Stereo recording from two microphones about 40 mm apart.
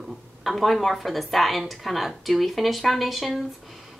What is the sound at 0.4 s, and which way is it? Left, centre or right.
Speech, centre.